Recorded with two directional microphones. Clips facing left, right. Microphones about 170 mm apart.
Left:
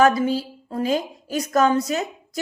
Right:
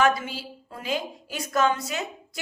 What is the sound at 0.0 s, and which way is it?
Speech, 40° left (ahead or behind).